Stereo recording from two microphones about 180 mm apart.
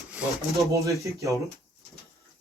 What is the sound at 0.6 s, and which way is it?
Speech, 15° right (ahead or behind).